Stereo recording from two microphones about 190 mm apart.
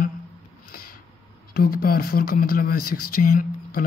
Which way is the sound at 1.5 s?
55° left (ahead or behind).